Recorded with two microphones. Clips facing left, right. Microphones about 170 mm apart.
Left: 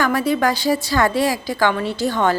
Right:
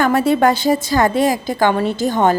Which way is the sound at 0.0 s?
25° right (ahead or behind).